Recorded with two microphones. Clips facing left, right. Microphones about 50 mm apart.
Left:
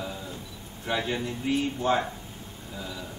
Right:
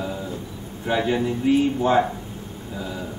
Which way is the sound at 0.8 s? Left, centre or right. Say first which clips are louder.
Right 7 dB; centre.